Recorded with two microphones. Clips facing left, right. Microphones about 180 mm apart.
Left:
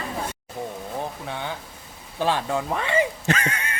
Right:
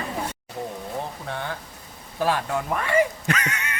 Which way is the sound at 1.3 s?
15° left (ahead or behind).